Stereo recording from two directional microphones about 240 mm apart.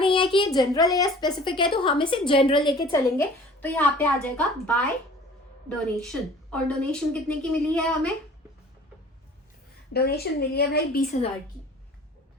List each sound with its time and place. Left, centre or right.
0.0 s child singing: left
0.9 s a woman's voice: centre
9.9 s a woman's voice: left